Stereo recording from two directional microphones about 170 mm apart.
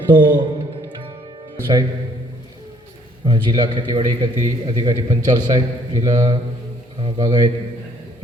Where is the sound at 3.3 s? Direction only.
25° right (ahead or behind).